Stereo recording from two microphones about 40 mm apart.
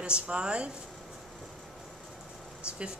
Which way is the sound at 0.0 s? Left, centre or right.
Right.